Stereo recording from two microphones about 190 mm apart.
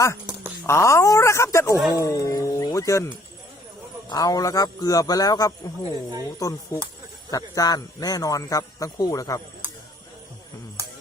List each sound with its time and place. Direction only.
0.7 s speech: 15° left (ahead or behind)
4.1 s a man's voice: 20° left (ahead or behind)